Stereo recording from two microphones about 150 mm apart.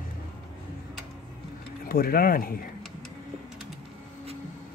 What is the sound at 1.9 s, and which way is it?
Speech, 75° left (ahead or behind).